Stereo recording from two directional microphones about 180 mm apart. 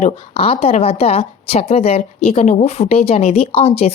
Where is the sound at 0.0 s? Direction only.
35° left (ahead or behind).